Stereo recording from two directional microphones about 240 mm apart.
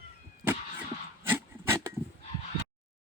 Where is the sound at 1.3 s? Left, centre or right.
Centre.